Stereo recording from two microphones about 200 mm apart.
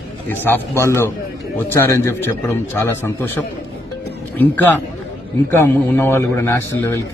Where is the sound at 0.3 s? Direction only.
10° left (ahead or behind).